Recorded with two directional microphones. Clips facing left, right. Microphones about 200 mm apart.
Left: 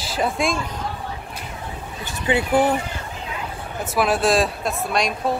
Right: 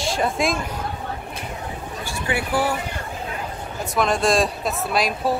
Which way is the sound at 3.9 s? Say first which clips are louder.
Left 1 dB; 5° left (ahead or behind).